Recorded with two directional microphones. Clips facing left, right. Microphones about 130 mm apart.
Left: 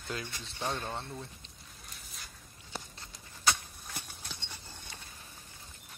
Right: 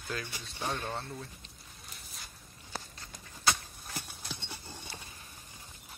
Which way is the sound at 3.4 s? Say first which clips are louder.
Even; 5° right (ahead or behind).